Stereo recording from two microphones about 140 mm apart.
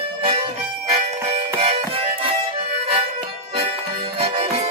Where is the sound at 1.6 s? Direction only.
40° right (ahead or behind).